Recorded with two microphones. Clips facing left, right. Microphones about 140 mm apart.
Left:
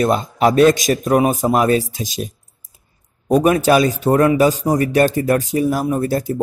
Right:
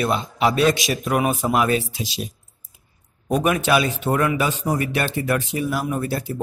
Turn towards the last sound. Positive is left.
turn(degrees=40)  # may be behind; listen again after turning